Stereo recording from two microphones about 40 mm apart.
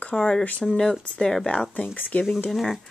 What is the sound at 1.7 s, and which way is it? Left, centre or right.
Speech, left.